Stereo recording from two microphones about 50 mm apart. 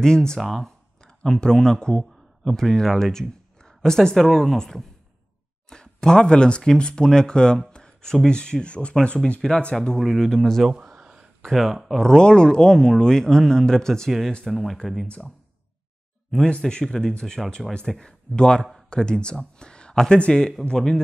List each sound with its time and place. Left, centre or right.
0.0 s speech: centre
0.4 s speech: centre
1.0 s a man's voice: centre
5.7 s speech: centre
9.8 s speech: centre
11.0 s a sound: centre
11.4 s speech: centre
16.4 s speech: left
16.8 s speech: centre
18.0 s speech: centre